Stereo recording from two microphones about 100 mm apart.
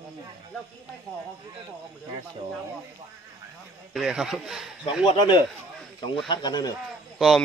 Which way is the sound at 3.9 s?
5° right (ahead or behind).